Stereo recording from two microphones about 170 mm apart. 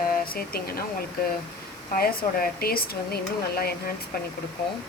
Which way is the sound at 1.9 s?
60° left (ahead or behind).